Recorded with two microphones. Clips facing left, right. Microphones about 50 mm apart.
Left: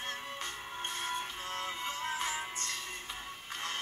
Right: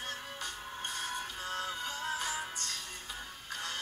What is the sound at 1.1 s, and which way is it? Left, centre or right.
Music, left.